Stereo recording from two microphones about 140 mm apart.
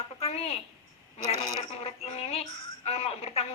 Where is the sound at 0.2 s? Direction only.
45° left (ahead or behind).